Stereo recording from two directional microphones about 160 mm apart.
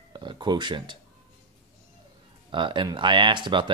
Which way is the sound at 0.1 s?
30° right (ahead or behind).